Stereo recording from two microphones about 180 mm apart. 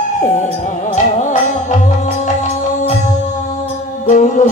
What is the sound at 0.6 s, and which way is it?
Music, 40° left (ahead or behind).